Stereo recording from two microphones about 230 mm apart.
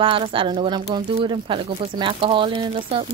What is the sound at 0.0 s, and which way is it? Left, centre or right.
Speech, right.